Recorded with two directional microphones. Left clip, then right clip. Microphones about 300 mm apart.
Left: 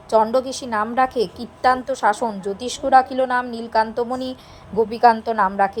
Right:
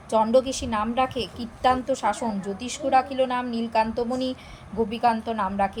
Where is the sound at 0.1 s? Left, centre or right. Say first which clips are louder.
Left 3 dB; centre.